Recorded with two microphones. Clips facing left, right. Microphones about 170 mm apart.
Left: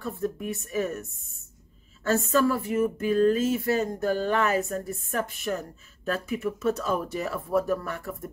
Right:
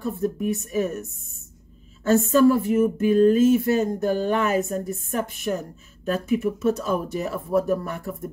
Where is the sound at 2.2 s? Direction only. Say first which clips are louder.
Right 8 dB; 25° right (ahead or behind).